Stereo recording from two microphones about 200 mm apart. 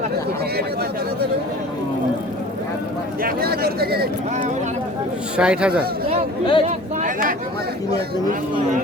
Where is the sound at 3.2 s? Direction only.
50° right (ahead or behind).